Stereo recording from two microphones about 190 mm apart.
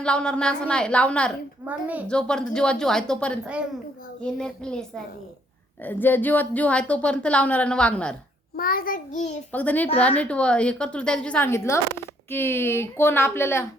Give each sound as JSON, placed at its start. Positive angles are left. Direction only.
{"t": 0.0, "sound": "a woman's voice", "side_deg": 5}
{"t": 1.6, "sound": "a woman's voice", "side_deg": -10}
{"t": 2.0, "sound": "a woman's voice", "side_deg": 5}
{"t": 8.5, "sound": "a child's voice", "side_deg": 50}
{"t": 9.5, "sound": "a woman's voice", "side_deg": 10}